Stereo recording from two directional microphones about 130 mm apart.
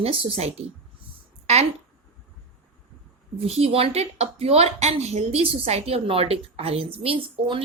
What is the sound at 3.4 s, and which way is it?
Speech, 50° right (ahead or behind).